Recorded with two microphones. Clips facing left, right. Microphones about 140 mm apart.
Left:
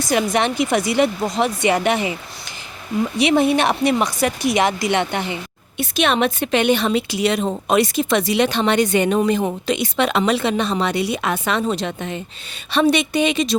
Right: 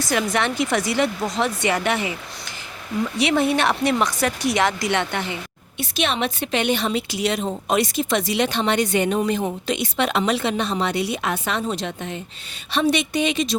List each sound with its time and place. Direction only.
0.0 s speech: 15° left (ahead or behind)
3.2 s speech: 15° left (ahead or behind)
5.8 s a woman's voice: 55° left (ahead or behind)